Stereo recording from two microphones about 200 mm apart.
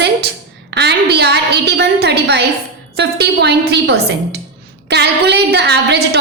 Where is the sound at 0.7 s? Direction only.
55° right (ahead or behind).